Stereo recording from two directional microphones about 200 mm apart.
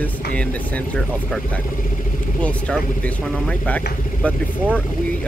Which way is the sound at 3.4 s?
5° left (ahead or behind).